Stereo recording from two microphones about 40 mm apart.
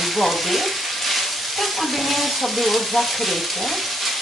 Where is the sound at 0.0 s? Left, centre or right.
Centre.